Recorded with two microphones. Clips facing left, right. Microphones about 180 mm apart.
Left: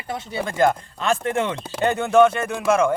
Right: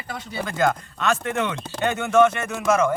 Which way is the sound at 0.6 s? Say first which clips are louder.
Left 2 dB; 30° left (ahead or behind).